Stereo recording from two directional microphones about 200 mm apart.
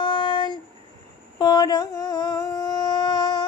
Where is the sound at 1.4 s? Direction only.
20° left (ahead or behind).